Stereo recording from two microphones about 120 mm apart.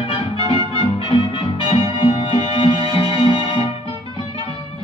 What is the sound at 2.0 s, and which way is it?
Music, 50° left (ahead or behind).